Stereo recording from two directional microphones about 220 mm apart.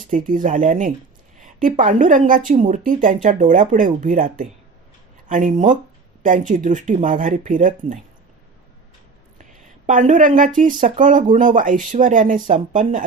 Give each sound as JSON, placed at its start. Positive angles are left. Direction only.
{"t": 0.1, "sound": "speech", "side_deg": -35}
{"t": 9.4, "sound": "speech", "side_deg": -35}